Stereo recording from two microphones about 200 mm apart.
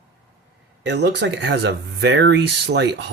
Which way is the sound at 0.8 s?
60° right (ahead or behind).